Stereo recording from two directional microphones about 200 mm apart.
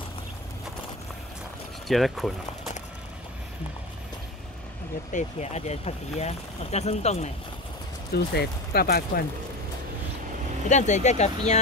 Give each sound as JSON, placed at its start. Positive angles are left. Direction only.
{"t": 1.9, "sound": "speech", "side_deg": 0}
{"t": 5.1, "sound": "speech", "side_deg": 35}
{"t": 8.1, "sound": "speech", "side_deg": 55}
{"t": 10.7, "sound": "speech", "side_deg": 35}